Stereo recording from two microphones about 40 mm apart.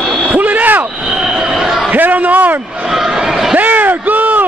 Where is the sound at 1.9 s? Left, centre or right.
Right.